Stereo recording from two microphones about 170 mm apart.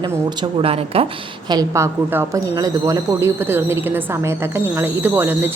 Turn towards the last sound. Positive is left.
turn(degrees=-10)  # may be behind; listen again after turning